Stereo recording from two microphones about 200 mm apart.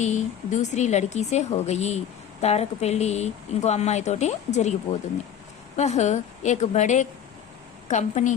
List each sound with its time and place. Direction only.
0.0 s a woman's voice: 35° left (ahead or behind)
5.7 s a woman's voice: 35° left (ahead or behind)